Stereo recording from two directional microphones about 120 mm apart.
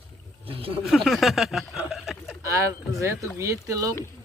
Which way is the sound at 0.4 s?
50° right (ahead or behind).